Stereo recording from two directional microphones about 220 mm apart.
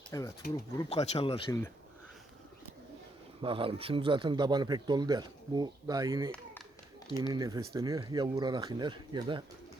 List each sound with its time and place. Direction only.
0.1 s speech: 15° left (ahead or behind)
0.9 s speech: 30° left (ahead or behind)
3.4 s speech: 25° right (ahead or behind)